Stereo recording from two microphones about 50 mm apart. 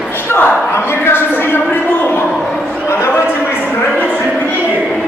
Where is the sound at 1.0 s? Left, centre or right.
Left.